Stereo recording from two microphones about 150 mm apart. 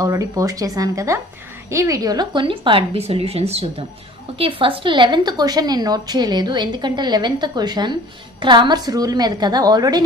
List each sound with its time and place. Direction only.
0.0 s a woman's voice: 20° right (ahead or behind)